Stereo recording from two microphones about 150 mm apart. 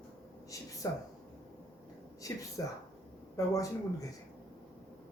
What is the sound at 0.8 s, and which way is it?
Speech, 20° left (ahead or behind).